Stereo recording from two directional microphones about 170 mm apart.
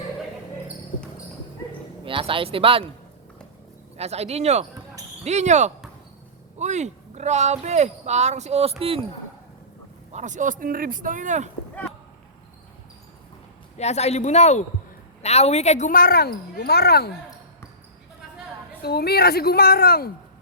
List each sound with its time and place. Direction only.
2.0 s speech: 30° right (ahead or behind)
3.9 s speech: 40° right (ahead or behind)
10.1 s speech: 45° right (ahead or behind)
13.7 s speech: 40° left (ahead or behind); by 17.1 s 70° left (ahead or behind)
18.8 s speech: 70° left (ahead or behind)